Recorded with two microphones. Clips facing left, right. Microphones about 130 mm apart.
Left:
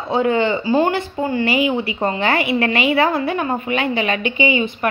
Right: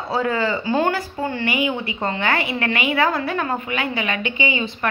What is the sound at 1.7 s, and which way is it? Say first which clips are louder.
A woman's voice: left 4 dB; 25° left (ahead or behind).